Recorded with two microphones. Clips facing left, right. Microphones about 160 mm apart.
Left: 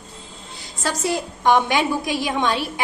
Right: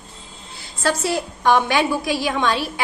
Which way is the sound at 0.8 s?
20° left (ahead or behind).